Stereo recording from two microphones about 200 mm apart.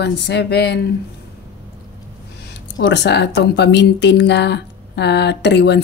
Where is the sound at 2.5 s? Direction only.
65° left (ahead or behind).